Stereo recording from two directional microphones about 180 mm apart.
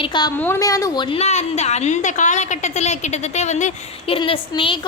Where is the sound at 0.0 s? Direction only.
25° left (ahead or behind).